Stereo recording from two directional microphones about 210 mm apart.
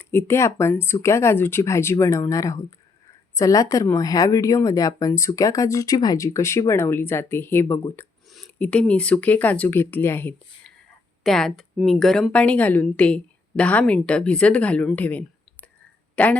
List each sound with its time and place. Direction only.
0.0 s a woman's voice: 10° left (ahead or behind)